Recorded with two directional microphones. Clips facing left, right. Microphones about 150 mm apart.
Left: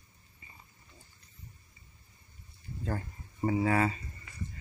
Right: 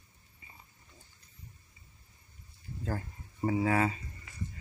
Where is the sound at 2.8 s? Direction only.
Centre (ahead or behind).